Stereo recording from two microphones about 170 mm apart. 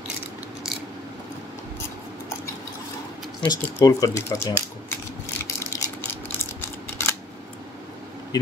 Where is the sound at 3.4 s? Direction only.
20° left (ahead or behind).